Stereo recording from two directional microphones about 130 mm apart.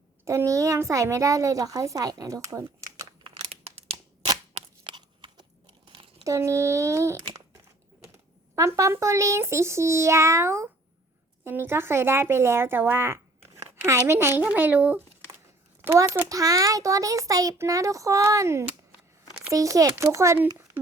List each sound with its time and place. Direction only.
0.3 s a child's voice: 25° right (ahead or behind)
3.2 s crumpling: 50° right (ahead or behind)
4.5 s crunch: 40° right (ahead or behind)
6.2 s a child's voice: 25° right (ahead or behind)
8.5 s a child's voice: 25° right (ahead or behind)